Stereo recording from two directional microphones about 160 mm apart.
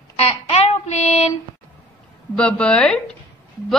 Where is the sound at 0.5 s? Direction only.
40° left (ahead or behind).